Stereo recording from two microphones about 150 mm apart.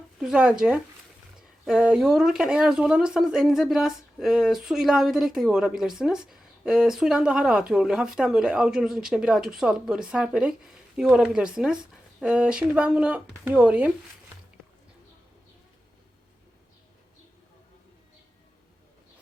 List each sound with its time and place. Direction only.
0.2 s speech: 5° right (ahead or behind)